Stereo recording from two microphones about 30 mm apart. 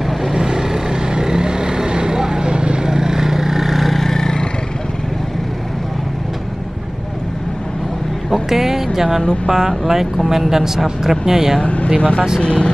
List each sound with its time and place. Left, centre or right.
0.3 s vehicle: right; by 4.5 s centre
8.5 s a sound: centre
9.5 s speech: centre
11.6 s vehicle: left
12.0 s speech: left